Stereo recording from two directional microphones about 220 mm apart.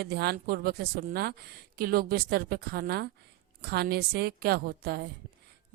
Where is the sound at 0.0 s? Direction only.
45° right (ahead or behind).